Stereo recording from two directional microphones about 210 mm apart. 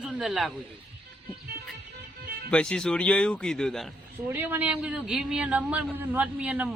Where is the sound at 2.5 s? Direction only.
5° left (ahead or behind).